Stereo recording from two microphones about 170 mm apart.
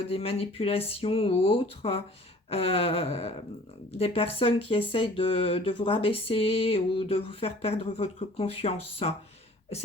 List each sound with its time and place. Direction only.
0.1 s speech: 35° left (ahead or behind)